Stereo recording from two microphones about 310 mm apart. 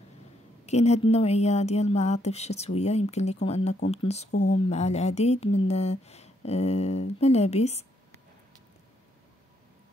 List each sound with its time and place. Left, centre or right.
0.7 s a woman's voice: left